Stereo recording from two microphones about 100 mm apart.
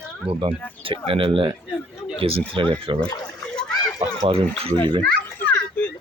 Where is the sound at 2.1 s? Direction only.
75° right (ahead or behind).